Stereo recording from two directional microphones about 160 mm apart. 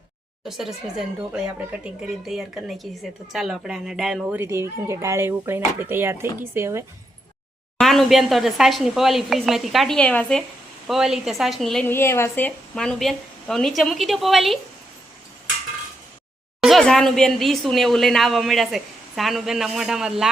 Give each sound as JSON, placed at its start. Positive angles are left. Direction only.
{"t": 0.4, "sound": "speech", "side_deg": 0}
{"t": 7.8, "sound": "speech", "side_deg": 0}
{"t": 11.9, "sound": "speech", "side_deg": 15}
{"t": 16.6, "sound": "speech", "side_deg": 0}